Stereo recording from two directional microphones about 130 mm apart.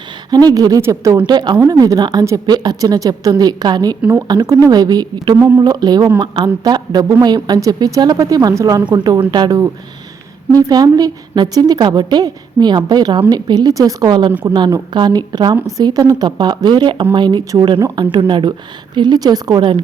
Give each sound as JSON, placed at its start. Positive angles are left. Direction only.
{"t": 0.3, "sound": "a woman's voice", "side_deg": -30}
{"t": 1.3, "sound": "a woman's voice", "side_deg": -35}